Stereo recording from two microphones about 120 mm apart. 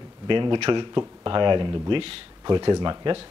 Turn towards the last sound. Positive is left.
turn(degrees=-40)  # may be behind; listen again after turning